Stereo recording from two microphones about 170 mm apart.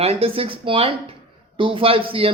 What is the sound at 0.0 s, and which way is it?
Speech, 35° right (ahead or behind).